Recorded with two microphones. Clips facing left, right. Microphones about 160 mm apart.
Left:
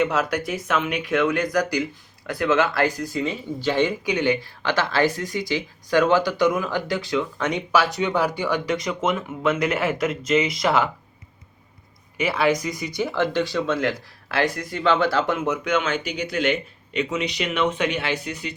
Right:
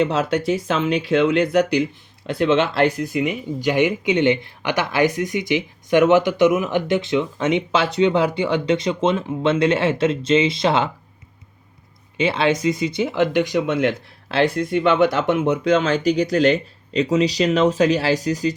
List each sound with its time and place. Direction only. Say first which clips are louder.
0.0 s speech: right 3 dB; 25° right (ahead or behind)
12.1 s speech: right 2 dB; 25° right (ahead or behind)